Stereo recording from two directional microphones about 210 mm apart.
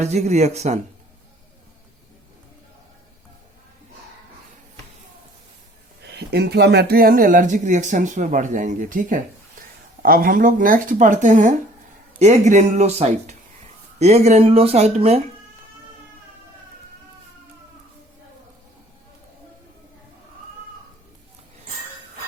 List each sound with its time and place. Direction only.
0.0 s speech: 35° right (ahead or behind)
6.0 s speech: 50° right (ahead or behind); by 15.2 s 30° right (ahead or behind)